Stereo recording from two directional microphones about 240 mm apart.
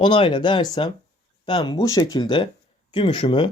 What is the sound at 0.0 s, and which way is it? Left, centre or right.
Speech, left.